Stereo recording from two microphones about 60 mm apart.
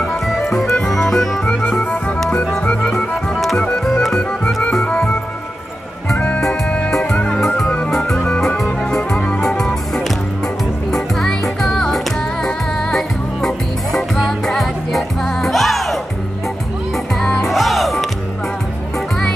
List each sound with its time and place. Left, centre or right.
0.0 s music: centre
1.8 s music: centre
2.8 s music: centre
6.1 s music: left
6.9 s music: centre
17.2 s music: centre
17.5 s music: centre